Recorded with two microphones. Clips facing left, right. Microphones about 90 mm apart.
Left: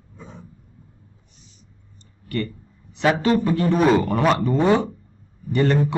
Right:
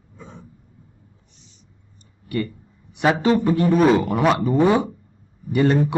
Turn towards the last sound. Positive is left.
turn(degrees=-15)  # may be behind; listen again after turning